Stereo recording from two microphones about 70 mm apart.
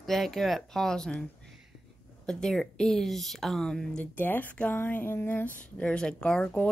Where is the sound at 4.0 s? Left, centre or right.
Left.